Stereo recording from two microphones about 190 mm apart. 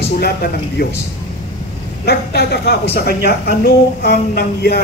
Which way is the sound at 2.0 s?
55° left (ahead or behind).